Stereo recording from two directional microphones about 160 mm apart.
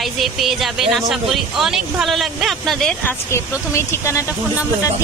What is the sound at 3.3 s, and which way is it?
A woman's voice, 15° left (ahead or behind).